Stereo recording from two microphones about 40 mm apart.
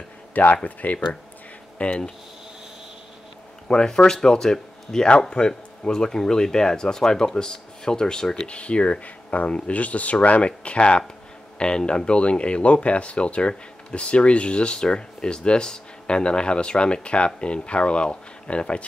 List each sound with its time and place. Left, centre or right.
0.3 s speech: left
0.7 s speech: left
1.8 s speech: left
3.6 s speech: centre